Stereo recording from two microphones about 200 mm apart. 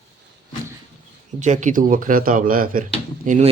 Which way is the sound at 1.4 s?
35° right (ahead or behind).